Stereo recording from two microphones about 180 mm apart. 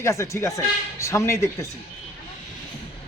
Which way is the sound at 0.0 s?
15° left (ahead or behind).